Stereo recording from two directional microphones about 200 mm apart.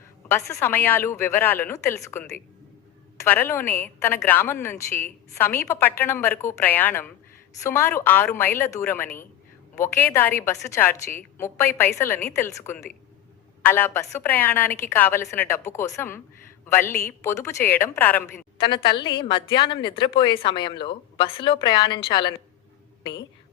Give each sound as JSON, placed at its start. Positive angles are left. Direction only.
{"t": 0.3, "sound": "a woman's voice", "side_deg": 10}
{"t": 18.5, "sound": "speech", "side_deg": 25}